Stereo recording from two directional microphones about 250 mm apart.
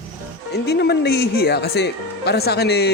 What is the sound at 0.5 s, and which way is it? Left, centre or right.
Speech, left.